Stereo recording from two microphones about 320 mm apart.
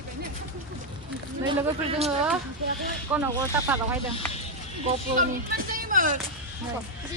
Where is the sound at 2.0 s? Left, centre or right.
Centre.